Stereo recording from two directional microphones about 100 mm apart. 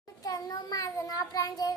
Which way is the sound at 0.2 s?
40° left (ahead or behind).